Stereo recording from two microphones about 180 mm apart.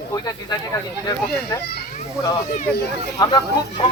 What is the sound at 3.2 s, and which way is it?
Speech, 25° left (ahead or behind).